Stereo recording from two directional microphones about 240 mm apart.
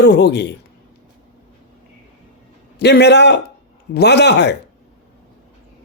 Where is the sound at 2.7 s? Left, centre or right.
Left.